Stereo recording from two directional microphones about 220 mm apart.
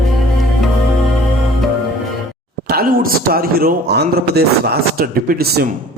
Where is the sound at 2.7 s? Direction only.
40° right (ahead or behind).